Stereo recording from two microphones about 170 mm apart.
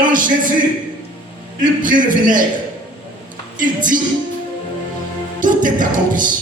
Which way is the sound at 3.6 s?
50° right (ahead or behind).